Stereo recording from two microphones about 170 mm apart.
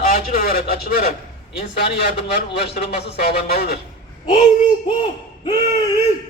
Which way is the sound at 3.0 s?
75° left (ahead or behind).